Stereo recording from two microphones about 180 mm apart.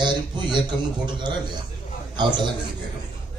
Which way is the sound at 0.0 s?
25° right (ahead or behind).